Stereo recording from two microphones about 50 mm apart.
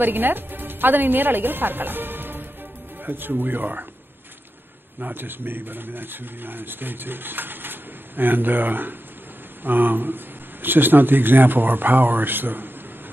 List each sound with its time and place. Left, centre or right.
0.0 s speech: right
5.0 s speech: right